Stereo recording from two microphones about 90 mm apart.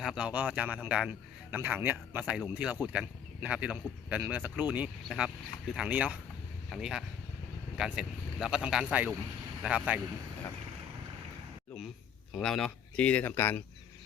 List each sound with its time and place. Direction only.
0.0 s a man's voice: 10° right (ahead or behind)
12.4 s speech: 5° left (ahead or behind)
13.3 s speech: 25° left (ahead or behind)